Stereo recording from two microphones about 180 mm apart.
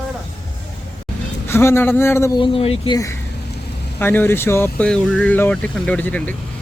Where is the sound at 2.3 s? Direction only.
30° left (ahead or behind).